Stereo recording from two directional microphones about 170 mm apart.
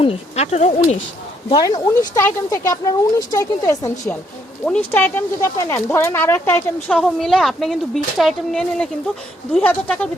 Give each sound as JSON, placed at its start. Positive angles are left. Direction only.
{"t": 0.0, "sound": "speech", "side_deg": 35}
{"t": 1.5, "sound": "a woman's voice", "side_deg": 25}